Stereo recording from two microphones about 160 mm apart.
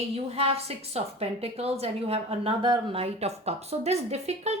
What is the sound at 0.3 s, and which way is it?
A woman's voice, 40° right (ahead or behind).